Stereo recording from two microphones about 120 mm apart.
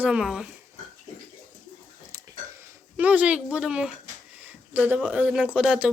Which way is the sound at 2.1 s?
25° right (ahead or behind).